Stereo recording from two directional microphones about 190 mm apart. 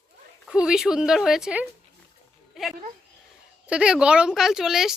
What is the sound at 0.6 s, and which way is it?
A woman's voice, 5° right (ahead or behind).